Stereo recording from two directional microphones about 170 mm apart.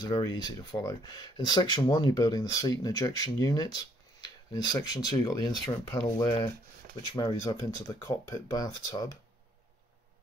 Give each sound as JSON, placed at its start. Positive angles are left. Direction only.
{"t": 0.0, "sound": "speech", "side_deg": 20}